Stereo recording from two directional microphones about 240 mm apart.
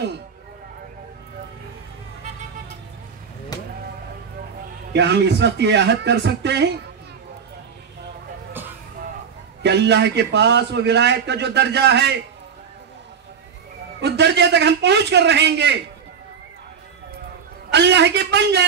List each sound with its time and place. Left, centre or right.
4.9 s a man's voice: right
9.6 s a man's voice: right
14.0 s a man's voice: right
17.6 s a man's voice: right